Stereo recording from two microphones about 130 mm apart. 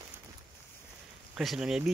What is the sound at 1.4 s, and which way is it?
Speech, 5° right (ahead or behind).